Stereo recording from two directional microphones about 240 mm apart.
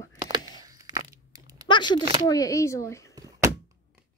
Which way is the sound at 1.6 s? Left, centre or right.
Centre.